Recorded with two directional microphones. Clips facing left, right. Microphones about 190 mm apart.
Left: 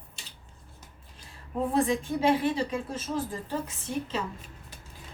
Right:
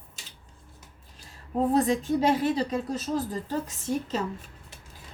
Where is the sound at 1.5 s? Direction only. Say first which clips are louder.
Right 3 dB; 40° right (ahead or behind).